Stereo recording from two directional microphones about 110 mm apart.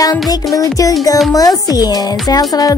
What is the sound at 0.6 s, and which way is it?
Speech, 30° left (ahead or behind).